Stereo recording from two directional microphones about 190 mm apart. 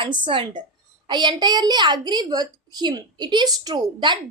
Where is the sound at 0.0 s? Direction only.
25° right (ahead or behind).